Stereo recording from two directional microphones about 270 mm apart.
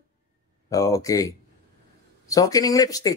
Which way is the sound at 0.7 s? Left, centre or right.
Centre.